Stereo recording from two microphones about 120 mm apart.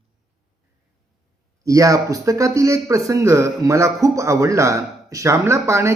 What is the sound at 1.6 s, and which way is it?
Speech, 25° right (ahead or behind).